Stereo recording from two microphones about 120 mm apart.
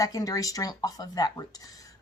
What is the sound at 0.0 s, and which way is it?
Speech, 30° left (ahead or behind).